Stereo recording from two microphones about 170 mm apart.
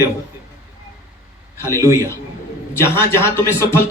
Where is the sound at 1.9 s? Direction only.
15° left (ahead or behind).